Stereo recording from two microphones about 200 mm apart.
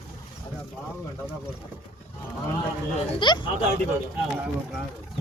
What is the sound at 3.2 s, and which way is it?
Speech, 20° left (ahead or behind).